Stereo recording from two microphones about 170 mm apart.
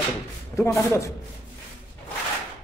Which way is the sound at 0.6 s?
15° left (ahead or behind).